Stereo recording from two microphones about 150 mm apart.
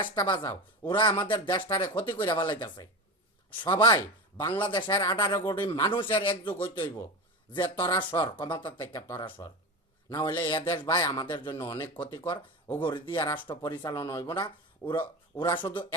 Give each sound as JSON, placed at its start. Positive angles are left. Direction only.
{"t": 0.0, "sound": "speech", "side_deg": 30}
{"t": 0.4, "sound": "speech", "side_deg": 15}
{"t": 0.9, "sound": "a man's voice", "side_deg": 30}